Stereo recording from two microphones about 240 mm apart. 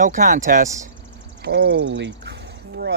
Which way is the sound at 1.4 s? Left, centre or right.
Right.